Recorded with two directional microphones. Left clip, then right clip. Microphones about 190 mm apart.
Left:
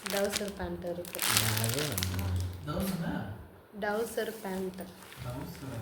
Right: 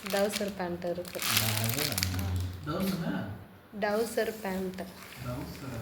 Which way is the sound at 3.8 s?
5° right (ahead or behind).